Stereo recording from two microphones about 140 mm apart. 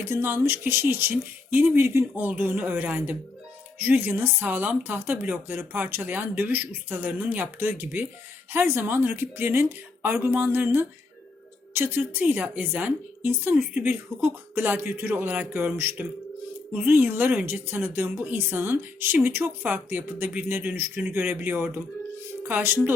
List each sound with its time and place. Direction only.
0.0 s speech: 15° right (ahead or behind)